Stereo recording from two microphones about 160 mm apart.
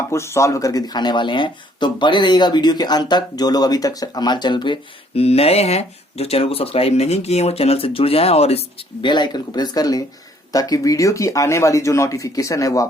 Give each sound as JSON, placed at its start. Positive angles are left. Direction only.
{"t": 0.1, "sound": "speech", "side_deg": 15}